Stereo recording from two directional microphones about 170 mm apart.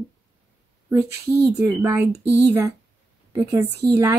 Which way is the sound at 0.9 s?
15° right (ahead or behind).